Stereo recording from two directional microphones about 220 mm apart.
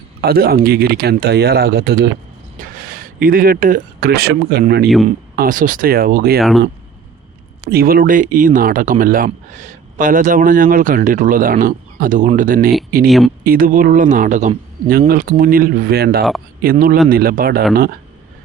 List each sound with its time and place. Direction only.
0.2 s speech: 45° right (ahead or behind)
5.0 s speech: 35° right (ahead or behind)
7.6 s speech: 45° right (ahead or behind)
13.1 s speech: centre (ahead or behind)
13.4 s speech: 40° right (ahead or behind)